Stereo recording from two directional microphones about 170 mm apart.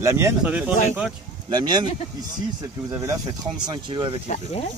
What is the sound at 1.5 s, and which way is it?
Speech, 25° right (ahead or behind).